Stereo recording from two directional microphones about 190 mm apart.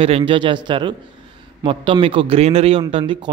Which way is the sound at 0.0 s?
30° right (ahead or behind).